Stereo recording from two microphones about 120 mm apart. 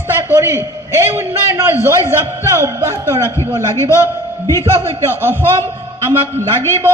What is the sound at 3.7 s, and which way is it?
Speech, 25° left (ahead or behind).